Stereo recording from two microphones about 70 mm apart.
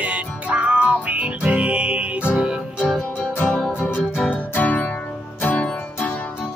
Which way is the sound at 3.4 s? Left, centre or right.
Centre.